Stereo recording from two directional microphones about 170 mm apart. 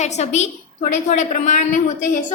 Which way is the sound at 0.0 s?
40° left (ahead or behind).